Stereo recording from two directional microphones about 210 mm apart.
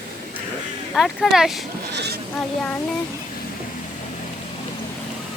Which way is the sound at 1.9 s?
55° right (ahead or behind).